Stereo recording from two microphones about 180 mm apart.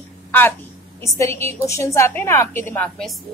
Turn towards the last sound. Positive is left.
turn(degrees=5)  # may be behind; listen again after turning